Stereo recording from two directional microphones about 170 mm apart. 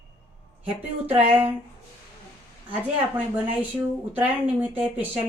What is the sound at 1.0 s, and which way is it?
Speech, 10° right (ahead or behind).